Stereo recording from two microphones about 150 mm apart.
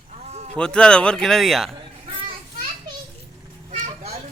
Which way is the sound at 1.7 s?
35° right (ahead or behind).